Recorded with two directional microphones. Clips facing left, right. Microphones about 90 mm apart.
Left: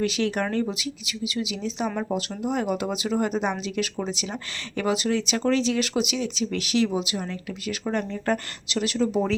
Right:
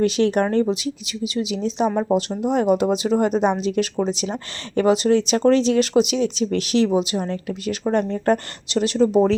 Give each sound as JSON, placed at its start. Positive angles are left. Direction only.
{"t": 0.0, "sound": "speech", "side_deg": -35}